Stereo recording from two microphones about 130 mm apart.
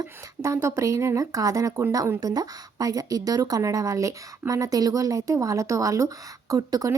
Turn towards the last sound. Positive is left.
turn(degrees=-25)  # may be behind; listen again after turning